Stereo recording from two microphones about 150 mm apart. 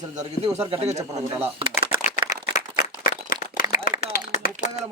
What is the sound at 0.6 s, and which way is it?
Speech, 40° right (ahead or behind).